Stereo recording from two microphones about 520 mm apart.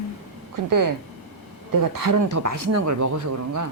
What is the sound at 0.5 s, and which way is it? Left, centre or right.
Speech, right.